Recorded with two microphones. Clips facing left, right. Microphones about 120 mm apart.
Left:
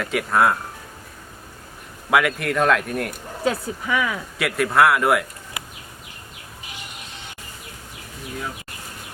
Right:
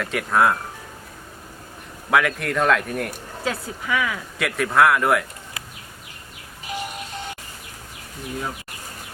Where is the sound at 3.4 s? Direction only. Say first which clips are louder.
Left 4 dB; 15° left (ahead or behind).